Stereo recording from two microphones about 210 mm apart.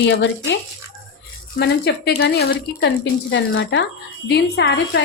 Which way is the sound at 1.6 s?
50° left (ahead or behind).